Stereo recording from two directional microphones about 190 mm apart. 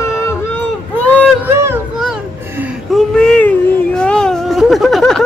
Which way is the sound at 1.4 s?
10° right (ahead or behind).